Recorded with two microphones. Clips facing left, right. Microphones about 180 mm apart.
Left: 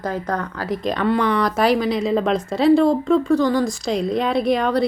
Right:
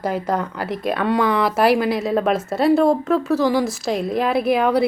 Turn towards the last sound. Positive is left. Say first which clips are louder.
# right 1 dB
turn(degrees=-5)  # may be behind; listen again after turning